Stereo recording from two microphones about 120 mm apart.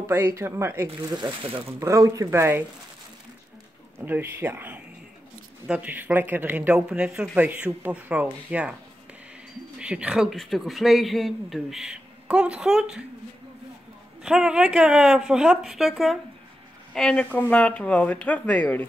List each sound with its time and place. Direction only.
0.0 s speech: 20° right (ahead or behind)
1.0 s speech: 40° right (ahead or behind)
1.8 s speech: 25° right (ahead or behind)
4.0 s speech: 15° right (ahead or behind)
9.8 s speech: 10° right (ahead or behind)
14.2 s speech: 5° right (ahead or behind); by 18.9 s 15° left (ahead or behind)